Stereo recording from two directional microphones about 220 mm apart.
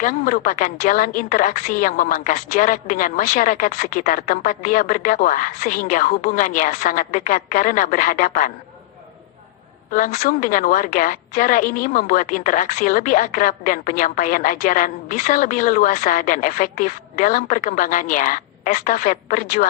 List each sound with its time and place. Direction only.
0.0 s a woman's voice: 35° left (ahead or behind)
9.9 s a woman's voice: 35° left (ahead or behind)